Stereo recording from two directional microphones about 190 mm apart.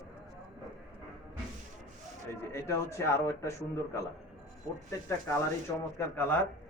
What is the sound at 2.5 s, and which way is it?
Speech, 15° left (ahead or behind).